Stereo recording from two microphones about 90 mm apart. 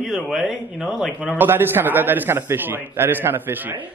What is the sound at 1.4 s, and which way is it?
Speech, 25° right (ahead or behind).